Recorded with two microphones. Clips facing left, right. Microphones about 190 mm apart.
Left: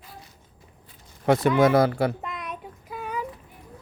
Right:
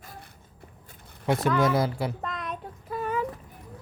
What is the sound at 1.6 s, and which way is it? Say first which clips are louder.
Speech: left 6 dB; 60° left (ahead or behind).